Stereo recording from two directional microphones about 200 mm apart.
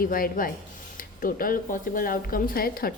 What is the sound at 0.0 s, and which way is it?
Speech, 45° left (ahead or behind).